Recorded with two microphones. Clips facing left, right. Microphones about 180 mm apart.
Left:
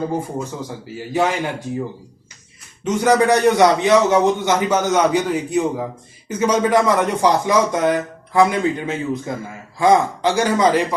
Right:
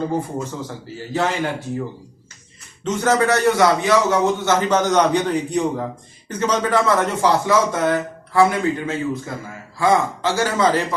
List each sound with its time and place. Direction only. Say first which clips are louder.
0.4 s speech: left 1 dB; 15° left (ahead or behind)
2.8 s speech: left 3 dB; 10° left (ahead or behind)